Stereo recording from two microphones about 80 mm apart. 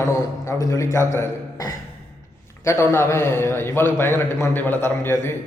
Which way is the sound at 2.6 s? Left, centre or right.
Left.